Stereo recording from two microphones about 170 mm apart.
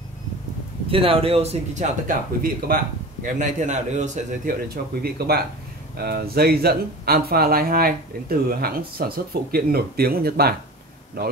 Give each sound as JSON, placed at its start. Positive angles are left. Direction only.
{"t": 0.8, "sound": "speech", "side_deg": -35}
{"t": 5.0, "sound": "speech", "side_deg": -65}